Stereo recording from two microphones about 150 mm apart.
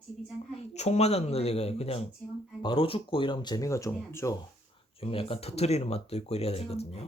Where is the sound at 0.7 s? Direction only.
45° left (ahead or behind); by 4.4 s 20° left (ahead or behind).